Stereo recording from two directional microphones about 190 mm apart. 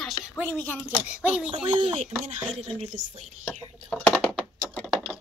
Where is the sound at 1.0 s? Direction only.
5° right (ahead or behind).